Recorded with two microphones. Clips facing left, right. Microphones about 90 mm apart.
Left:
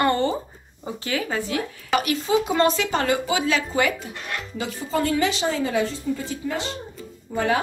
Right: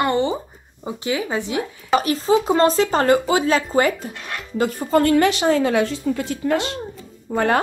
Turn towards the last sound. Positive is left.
turn(degrees=-55)  # may be behind; listen again after turning